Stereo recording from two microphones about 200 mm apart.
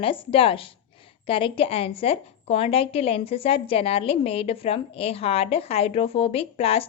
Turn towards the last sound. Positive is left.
turn(degrees=30)  # may be behind; listen again after turning